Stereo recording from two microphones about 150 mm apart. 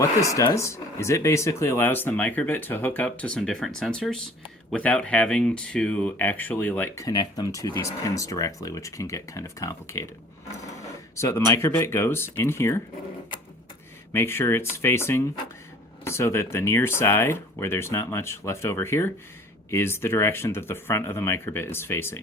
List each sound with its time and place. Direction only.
0.0 s speech: 20° left (ahead or behind)
11.2 s speech: 20° left (ahead or behind)
14.1 s speech: 15° left (ahead or behind)